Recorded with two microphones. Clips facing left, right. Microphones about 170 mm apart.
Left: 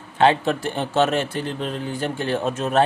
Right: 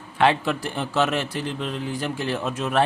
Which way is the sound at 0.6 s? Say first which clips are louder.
Left 3 dB; 30° left (ahead or behind).